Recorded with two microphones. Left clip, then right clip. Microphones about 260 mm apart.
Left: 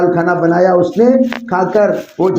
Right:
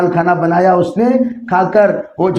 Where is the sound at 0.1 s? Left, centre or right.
Right.